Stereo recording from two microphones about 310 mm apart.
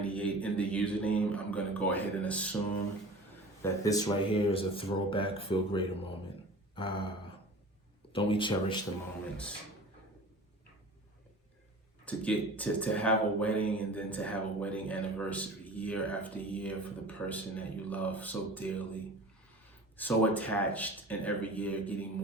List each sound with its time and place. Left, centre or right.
0.0 s a sound: centre
3.6 s speech: centre
8.1 s speech: centre
12.0 s speech: centre